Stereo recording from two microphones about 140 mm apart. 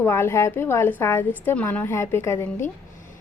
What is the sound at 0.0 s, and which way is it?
A woman's voice, 15° left (ahead or behind).